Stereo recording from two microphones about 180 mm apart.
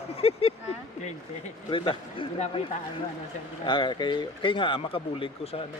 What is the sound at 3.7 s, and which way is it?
Speech, 25° left (ahead or behind).